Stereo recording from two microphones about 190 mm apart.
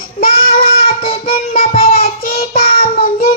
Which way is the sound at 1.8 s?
50° left (ahead or behind).